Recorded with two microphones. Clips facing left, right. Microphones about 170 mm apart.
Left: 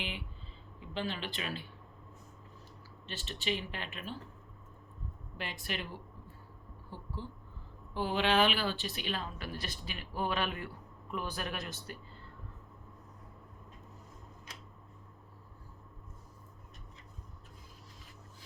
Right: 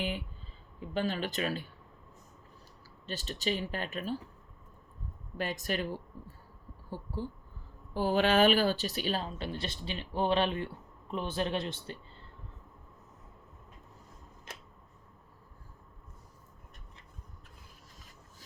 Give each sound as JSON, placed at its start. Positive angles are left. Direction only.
{"t": 0.9, "sound": "speech", "side_deg": -45}
{"t": 3.1, "sound": "speech", "side_deg": -40}
{"t": 5.4, "sound": "speech", "side_deg": -40}